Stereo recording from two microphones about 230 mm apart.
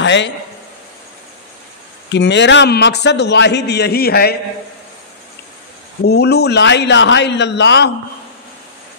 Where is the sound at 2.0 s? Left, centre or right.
Left.